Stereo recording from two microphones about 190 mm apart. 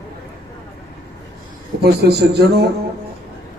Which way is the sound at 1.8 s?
55° right (ahead or behind).